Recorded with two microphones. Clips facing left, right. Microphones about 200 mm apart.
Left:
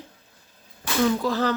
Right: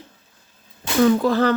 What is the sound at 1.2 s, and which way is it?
Speech, 55° right (ahead or behind).